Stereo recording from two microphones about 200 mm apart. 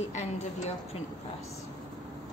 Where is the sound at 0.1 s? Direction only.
35° left (ahead or behind).